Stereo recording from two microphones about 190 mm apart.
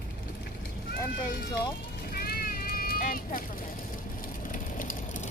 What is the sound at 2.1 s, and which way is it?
Vehicle, 55° left (ahead or behind).